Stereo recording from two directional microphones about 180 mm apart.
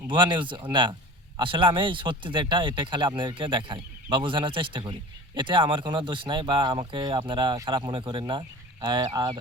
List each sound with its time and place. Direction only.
0.1 s speech: 25° right (ahead or behind)